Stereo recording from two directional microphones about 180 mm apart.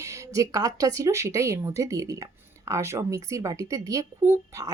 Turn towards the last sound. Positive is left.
turn(degrees=-15)  # may be behind; listen again after turning